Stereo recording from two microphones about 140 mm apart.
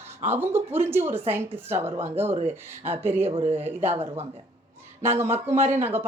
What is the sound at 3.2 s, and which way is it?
Speech, 45° right (ahead or behind).